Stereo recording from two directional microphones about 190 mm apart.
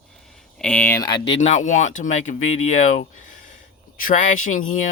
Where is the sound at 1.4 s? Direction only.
40° left (ahead or behind).